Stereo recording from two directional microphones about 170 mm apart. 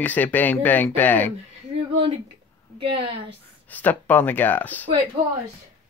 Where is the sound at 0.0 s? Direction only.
10° left (ahead or behind).